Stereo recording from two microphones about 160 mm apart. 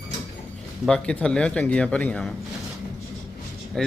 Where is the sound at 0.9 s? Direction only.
5° left (ahead or behind).